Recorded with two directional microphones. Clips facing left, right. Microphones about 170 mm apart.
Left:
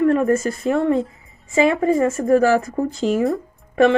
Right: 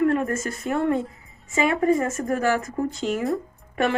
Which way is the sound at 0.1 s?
35° left (ahead or behind).